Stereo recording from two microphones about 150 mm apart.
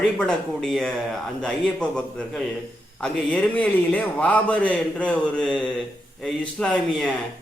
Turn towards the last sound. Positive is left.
turn(degrees=5)  # may be behind; listen again after turning